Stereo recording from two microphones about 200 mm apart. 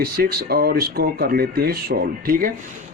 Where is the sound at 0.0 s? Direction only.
50° right (ahead or behind).